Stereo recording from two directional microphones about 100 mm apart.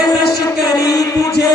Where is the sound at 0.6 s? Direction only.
40° left (ahead or behind).